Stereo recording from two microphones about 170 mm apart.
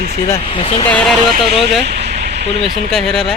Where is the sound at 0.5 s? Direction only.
35° left (ahead or behind).